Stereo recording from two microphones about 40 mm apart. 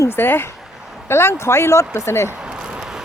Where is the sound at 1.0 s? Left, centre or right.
Left.